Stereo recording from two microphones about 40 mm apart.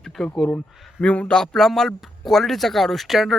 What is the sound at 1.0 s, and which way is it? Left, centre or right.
Speech, left.